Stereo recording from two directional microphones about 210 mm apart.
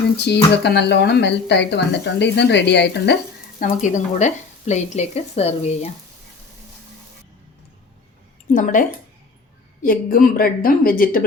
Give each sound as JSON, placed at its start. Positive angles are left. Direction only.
{"t": 0.5, "sound": "a woman's voice", "side_deg": 55}
{"t": 3.6, "sound": "speech", "side_deg": 35}
{"t": 8.5, "sound": "a woman's voice", "side_deg": 40}